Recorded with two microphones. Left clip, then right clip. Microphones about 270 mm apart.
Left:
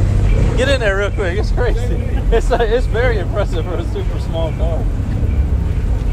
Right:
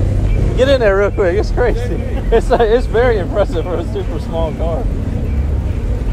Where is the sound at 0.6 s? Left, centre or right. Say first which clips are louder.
Right 5 dB; right.